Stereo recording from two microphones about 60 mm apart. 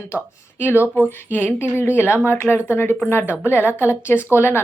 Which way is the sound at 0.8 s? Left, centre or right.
Right.